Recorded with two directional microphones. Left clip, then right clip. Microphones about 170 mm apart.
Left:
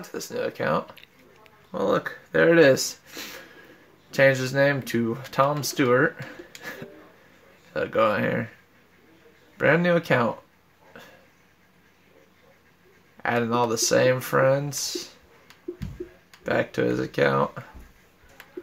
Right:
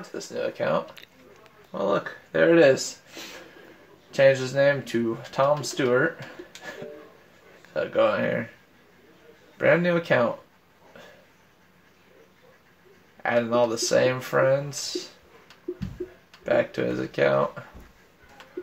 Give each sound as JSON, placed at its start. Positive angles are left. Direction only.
{"t": 0.2, "sound": "speech", "side_deg": 80}
{"t": 7.7, "sound": "speech", "side_deg": 75}
{"t": 9.6, "sound": "speech", "side_deg": 75}
{"t": 13.2, "sound": "speech", "side_deg": 75}
{"t": 16.4, "sound": "speech", "side_deg": 75}